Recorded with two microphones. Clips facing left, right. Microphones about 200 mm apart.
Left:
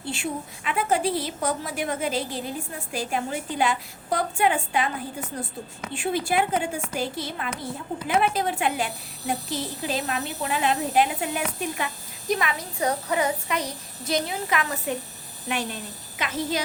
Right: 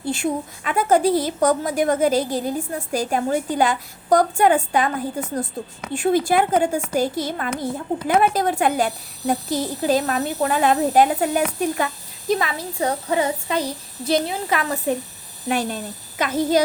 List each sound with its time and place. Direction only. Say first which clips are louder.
0.1 s a woman's voice: right 7 dB; 45° right (ahead or behind)
5.9 s a woman's voice: right 7 dB; 45° right (ahead or behind)
12.3 s a child's voice: right 4 dB; 30° right (ahead or behind)